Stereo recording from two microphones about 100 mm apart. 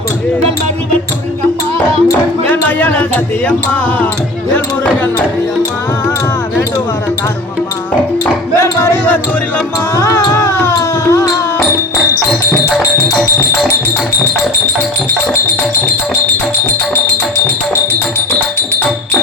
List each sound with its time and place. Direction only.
2.5 s speech: 15° left (ahead or behind)
8.5 s a sound: 25° left (ahead or behind)
9.9 s music: 25° left (ahead or behind)